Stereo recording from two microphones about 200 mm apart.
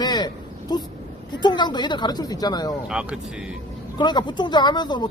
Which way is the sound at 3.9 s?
20° left (ahead or behind).